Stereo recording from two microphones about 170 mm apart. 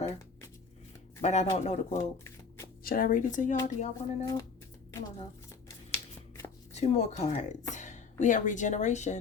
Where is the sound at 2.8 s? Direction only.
60° left (ahead or behind); by 4.2 s 45° left (ahead or behind).